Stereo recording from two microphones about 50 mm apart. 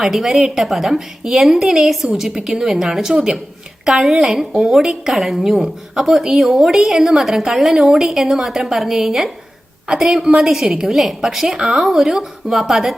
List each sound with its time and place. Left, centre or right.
0.0 s a woman's voice: centre